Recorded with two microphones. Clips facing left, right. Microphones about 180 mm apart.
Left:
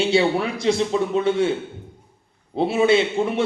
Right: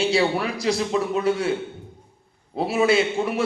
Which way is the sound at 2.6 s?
25° left (ahead or behind).